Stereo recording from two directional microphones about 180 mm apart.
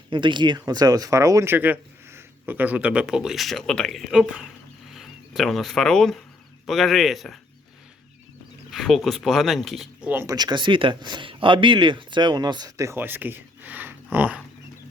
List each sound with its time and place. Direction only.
0.1 s speech: 25° right (ahead or behind); by 7.3 s centre (ahead or behind)
8.7 s speech: centre (ahead or behind)
10.3 s speech: 25° right (ahead or behind); by 14.4 s 10° right (ahead or behind)